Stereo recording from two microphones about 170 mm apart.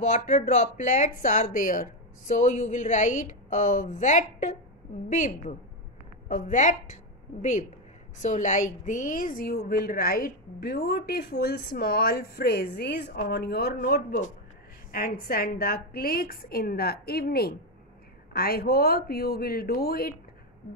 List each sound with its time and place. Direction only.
0.1 s speech: 45° left (ahead or behind)
8.2 s a woman's voice: 45° left (ahead or behind); by 13.7 s 70° left (ahead or behind)
13.7 s a woman's voice: 55° left (ahead or behind)